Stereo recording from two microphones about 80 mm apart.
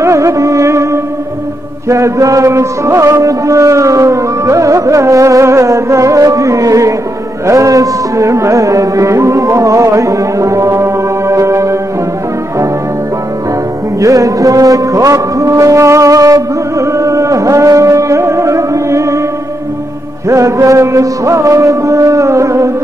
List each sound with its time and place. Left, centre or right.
0.0 s music: right
1.9 s music: right
14.0 s music: right
20.2 s music: right